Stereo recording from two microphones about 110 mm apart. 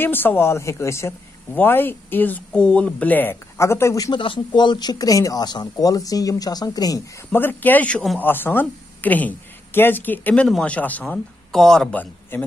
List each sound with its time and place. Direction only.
0.0 s a man's voice: 20° left (ahead or behind)
4.1 s speech: 50° left (ahead or behind)
7.3 s a man's voice: 15° left (ahead or behind)